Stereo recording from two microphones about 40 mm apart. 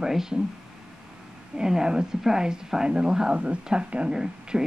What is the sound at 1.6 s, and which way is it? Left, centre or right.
Speech, centre.